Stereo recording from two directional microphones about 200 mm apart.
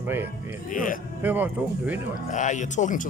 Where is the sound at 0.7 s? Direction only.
45° left (ahead or behind).